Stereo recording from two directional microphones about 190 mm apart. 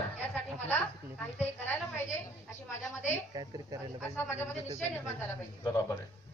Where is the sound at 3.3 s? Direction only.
20° right (ahead or behind).